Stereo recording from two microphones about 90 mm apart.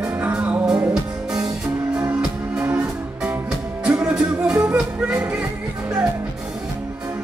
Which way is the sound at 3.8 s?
10° right (ahead or behind).